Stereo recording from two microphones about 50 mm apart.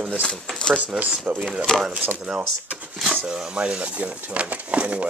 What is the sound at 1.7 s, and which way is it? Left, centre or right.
Speech, centre.